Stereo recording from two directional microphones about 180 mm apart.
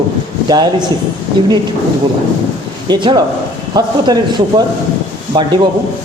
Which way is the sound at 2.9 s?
25° right (ahead or behind).